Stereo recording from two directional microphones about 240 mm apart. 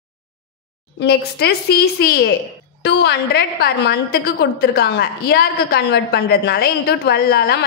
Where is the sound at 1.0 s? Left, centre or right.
Left.